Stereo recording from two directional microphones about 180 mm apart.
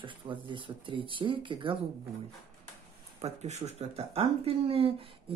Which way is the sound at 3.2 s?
40° right (ahead or behind).